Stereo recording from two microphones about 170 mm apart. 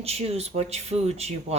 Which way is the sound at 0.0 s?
35° right (ahead or behind).